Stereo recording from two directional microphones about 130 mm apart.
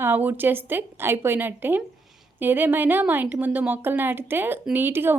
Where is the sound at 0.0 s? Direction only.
15° right (ahead or behind).